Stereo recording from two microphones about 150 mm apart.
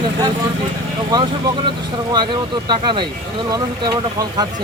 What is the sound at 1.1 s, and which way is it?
Speech, 30° right (ahead or behind).